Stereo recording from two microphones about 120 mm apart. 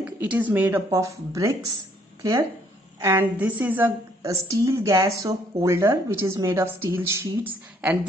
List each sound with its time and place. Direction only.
0.0 s speech: 10° right (ahead or behind)
0.8 s speech: 30° right (ahead or behind)
3.0 s a woman's voice: 20° right (ahead or behind)
4.2 s speech: 25° right (ahead or behind)